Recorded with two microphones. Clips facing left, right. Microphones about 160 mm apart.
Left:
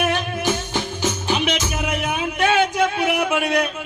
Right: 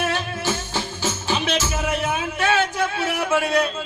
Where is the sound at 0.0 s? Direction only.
15° left (ahead or behind).